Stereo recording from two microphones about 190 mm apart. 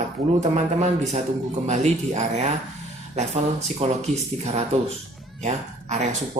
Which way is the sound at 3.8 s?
30° right (ahead or behind).